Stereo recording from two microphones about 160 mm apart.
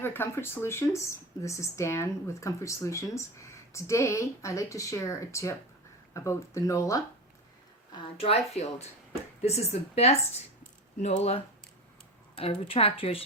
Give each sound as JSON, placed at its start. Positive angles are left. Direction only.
{"t": 0.0, "sound": "speech", "side_deg": 15}
{"t": 7.9, "sound": "speech", "side_deg": 40}